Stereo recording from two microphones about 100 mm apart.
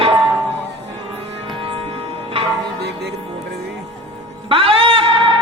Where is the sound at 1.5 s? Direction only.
60° right (ahead or behind).